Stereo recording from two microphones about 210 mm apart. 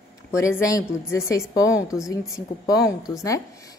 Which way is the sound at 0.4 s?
15° left (ahead or behind).